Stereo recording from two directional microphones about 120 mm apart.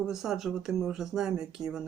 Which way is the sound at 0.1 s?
Centre (ahead or behind).